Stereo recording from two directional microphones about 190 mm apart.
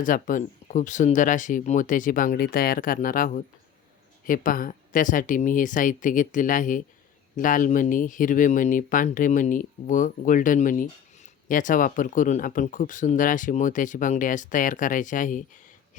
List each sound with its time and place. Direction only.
0.0 s speech: 45° left (ahead or behind)